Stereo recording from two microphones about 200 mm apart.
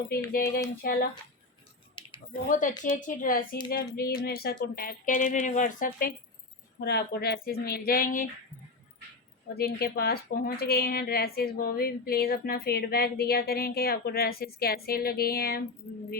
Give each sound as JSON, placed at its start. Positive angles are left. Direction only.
{"t": 0.1, "sound": "speech", "side_deg": 50}
{"t": 2.0, "sound": "a sound", "side_deg": 25}
{"t": 2.8, "sound": "speech", "side_deg": 40}
{"t": 9.6, "sound": "speech", "side_deg": 50}